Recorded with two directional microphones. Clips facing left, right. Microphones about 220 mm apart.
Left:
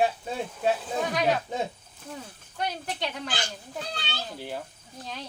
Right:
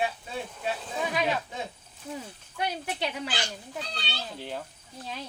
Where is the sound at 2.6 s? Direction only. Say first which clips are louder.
Even; 10° right (ahead or behind).